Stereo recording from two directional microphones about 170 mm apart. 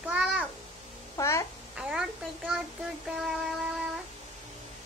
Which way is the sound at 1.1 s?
15° left (ahead or behind).